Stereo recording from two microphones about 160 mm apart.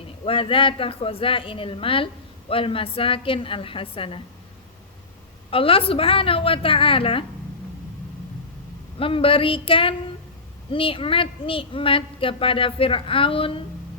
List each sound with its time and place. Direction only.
0.3 s a woman's voice: 35° left (ahead or behind)
5.5 s a woman's voice: 35° left (ahead or behind)
9.0 s a woman's voice: 35° left (ahead or behind)